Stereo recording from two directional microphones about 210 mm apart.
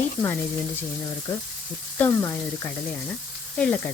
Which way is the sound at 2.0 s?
15° left (ahead or behind).